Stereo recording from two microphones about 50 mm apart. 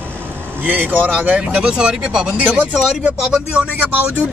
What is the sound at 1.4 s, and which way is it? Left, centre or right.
Speech, centre.